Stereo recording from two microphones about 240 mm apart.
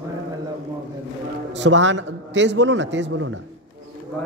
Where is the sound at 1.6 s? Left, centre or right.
Right.